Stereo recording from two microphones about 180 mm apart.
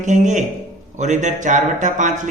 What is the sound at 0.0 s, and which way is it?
A man's voice, 45° right (ahead or behind).